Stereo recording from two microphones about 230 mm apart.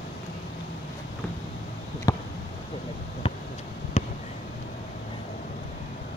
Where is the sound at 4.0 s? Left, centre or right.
Left.